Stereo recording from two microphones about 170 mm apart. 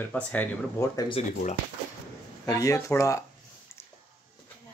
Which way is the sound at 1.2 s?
40° left (ahead or behind).